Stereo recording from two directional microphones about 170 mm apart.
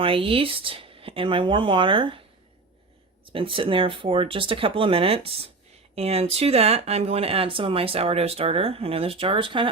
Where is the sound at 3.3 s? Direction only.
30° right (ahead or behind).